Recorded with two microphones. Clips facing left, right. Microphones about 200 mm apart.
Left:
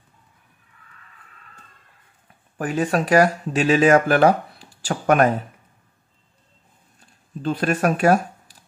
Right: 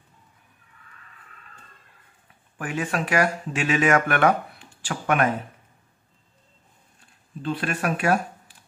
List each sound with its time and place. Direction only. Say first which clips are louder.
2.5 s speech: left 6 dB; 35° left (ahead or behind)
7.4 s speech: left 6 dB; 40° left (ahead or behind)